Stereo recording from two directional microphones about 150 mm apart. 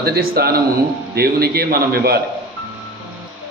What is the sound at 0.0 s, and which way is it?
A man's voice, 85° right.